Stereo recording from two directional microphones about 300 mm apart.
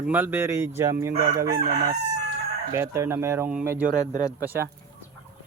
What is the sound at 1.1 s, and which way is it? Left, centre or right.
Speech, right.